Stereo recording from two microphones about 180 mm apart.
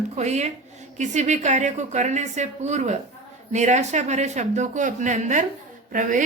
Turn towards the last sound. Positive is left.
turn(degrees=-45)  # may be behind; listen again after turning